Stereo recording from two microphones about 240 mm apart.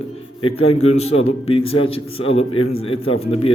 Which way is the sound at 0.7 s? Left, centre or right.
Left.